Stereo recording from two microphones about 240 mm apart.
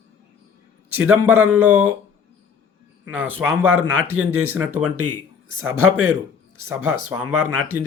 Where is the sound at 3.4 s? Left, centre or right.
Right.